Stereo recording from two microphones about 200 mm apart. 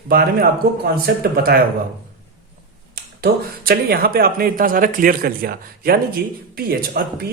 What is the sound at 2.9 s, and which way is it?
Speech, 50° right (ahead or behind).